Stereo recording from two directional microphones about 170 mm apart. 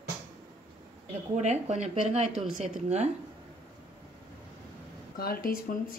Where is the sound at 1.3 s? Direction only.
40° right (ahead or behind).